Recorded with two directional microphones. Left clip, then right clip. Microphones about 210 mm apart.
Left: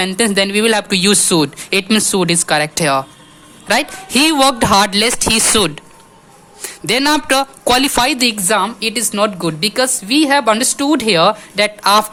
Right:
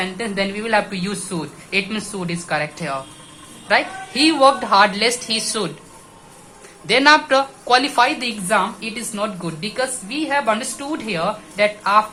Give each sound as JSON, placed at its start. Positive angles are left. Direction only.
{"t": 0.0, "sound": "speech", "side_deg": 50}
{"t": 6.8, "sound": "speech", "side_deg": 50}